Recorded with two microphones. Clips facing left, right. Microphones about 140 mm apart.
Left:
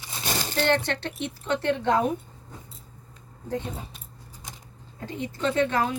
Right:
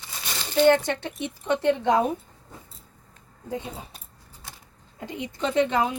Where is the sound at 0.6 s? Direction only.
10° right (ahead or behind).